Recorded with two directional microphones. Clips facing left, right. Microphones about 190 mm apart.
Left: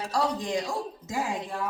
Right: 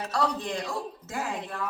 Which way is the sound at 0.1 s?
15° left (ahead or behind).